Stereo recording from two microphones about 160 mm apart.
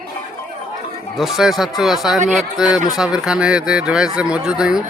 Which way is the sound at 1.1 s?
Centre (ahead or behind).